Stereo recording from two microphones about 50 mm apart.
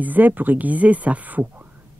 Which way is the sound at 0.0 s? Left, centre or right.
Right.